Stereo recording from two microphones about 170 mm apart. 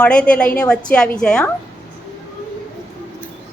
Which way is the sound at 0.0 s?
5° left (ahead or behind).